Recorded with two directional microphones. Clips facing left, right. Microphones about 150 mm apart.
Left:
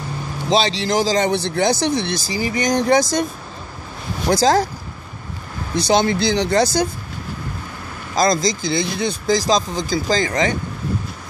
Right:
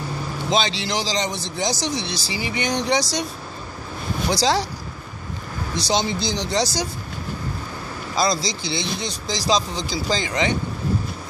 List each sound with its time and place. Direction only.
0.5 s speech: 35° left (ahead or behind)
4.3 s speech: 50° left (ahead or behind)
5.8 s speech: 55° left (ahead or behind)
8.2 s speech: 45° left (ahead or behind)